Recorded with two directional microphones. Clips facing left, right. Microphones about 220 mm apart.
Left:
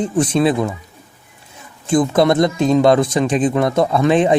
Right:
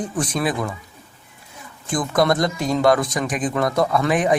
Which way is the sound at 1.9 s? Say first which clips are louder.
Left 6 dB; 25° left (ahead or behind).